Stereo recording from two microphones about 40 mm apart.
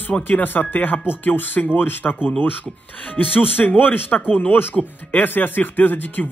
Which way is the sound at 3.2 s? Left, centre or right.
Left.